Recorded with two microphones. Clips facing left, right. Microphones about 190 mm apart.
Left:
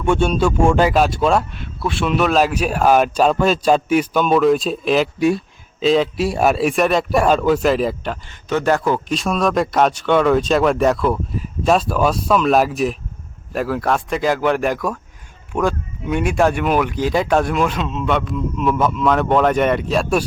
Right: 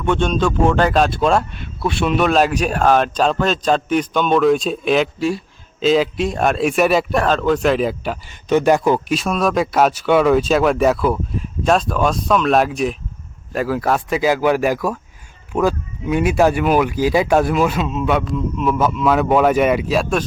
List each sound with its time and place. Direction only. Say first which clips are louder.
0.0 s speech: left 1 dB; 10° left (ahead or behind)
7.1 s speech: left 2 dB; 10° left (ahead or behind)
8.4 s speech: right 3 dB; 15° right (ahead or behind)
9.1 s speech: even; centre (ahead or behind)